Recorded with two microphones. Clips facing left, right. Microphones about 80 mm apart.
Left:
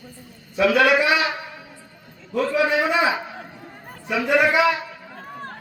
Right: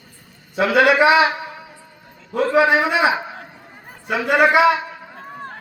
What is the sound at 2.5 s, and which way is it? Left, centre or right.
Speech, right.